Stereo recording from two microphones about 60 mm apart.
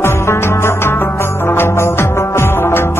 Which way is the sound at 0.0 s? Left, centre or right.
Left.